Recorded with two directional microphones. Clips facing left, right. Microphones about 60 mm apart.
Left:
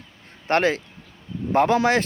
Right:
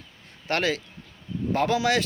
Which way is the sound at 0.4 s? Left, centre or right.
Left.